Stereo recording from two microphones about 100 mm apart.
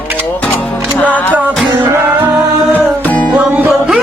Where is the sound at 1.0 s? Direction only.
15° left (ahead or behind).